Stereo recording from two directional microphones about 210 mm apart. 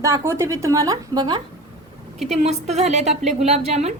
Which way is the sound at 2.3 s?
30° right (ahead or behind).